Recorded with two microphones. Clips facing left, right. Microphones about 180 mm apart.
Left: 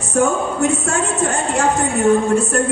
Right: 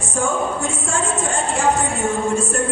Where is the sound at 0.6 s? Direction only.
65° left (ahead or behind).